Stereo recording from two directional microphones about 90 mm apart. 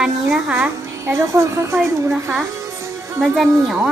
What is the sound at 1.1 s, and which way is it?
Speech, 30° right (ahead or behind).